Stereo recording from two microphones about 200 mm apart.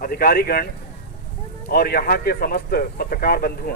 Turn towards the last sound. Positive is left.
turn(degrees=50)  # may be behind; listen again after turning